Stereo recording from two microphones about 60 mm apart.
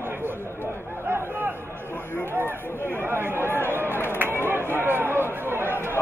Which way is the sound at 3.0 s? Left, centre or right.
Right.